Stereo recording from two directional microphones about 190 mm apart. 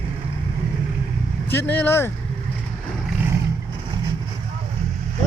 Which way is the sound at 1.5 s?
10° left (ahead or behind).